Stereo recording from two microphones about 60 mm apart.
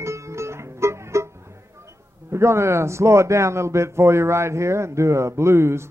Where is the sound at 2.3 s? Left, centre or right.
Right.